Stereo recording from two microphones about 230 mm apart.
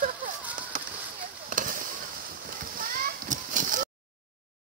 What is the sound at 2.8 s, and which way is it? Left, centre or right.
Children playing, right.